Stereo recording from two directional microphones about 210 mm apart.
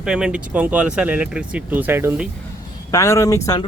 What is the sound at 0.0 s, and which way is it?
Speech, 5° right (ahead or behind).